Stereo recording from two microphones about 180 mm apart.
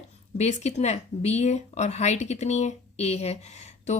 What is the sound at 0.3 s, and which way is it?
Speech, 40° left (ahead or behind).